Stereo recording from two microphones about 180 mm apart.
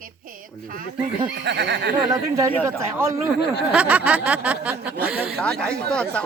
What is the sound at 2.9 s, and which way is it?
Speech, 15° right (ahead or behind).